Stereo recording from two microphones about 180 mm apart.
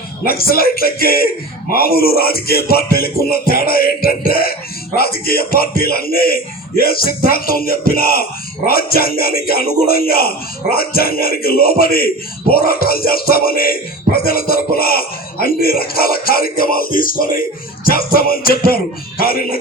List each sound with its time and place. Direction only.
0.3 s speech: 55° left (ahead or behind)